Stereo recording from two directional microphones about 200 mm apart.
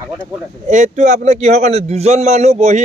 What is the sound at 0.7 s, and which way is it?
A man's voice, 35° right (ahead or behind).